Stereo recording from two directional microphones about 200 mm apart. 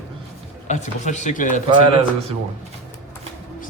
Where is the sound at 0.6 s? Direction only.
35° left (ahead or behind).